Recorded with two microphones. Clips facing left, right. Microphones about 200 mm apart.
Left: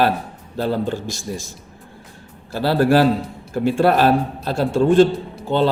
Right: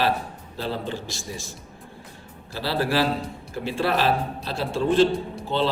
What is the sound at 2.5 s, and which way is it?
Speech, 50° left (ahead or behind).